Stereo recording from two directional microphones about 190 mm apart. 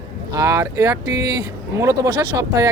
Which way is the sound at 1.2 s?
55° right (ahead or behind).